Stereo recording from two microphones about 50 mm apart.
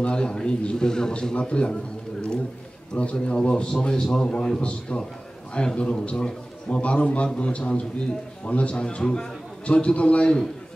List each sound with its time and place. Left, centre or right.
0.0 s a man's voice: centre
2.9 s a man's voice: left
8.8 s a man's voice: centre
9.7 s a man's voice: left